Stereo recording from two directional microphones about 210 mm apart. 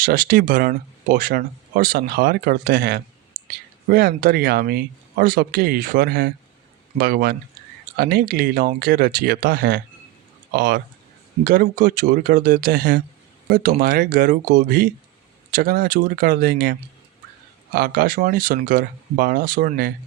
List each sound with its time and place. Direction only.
0.0 s speech: 45° right (ahead or behind)
3.3 s whispering: 65° right (ahead or behind)
3.8 s speech: 45° right (ahead or behind)